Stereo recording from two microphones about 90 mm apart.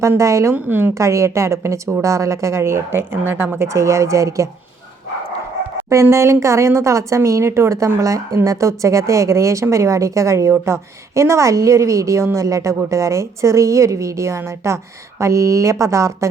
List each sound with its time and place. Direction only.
0.2 s a woman's voice: 35° right (ahead or behind)
0.5 s a woman's voice: 20° right (ahead or behind)
0.9 s a woman's voice: 35° right (ahead or behind)
5.9 s a woman's voice: 35° right (ahead or behind)